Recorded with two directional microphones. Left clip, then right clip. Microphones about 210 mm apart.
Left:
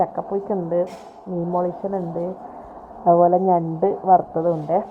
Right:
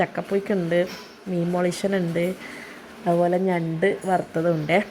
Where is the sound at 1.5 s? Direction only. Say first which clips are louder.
Left 1 dB; 40° right (ahead or behind).